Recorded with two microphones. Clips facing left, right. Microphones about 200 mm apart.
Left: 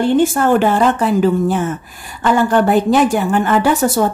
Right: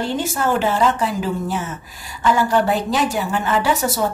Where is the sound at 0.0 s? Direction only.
55° left (ahead or behind).